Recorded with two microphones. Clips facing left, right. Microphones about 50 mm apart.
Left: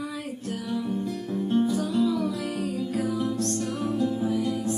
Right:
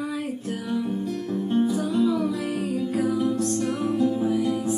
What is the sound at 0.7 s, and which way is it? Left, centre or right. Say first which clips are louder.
Music: right 2 dB; centre.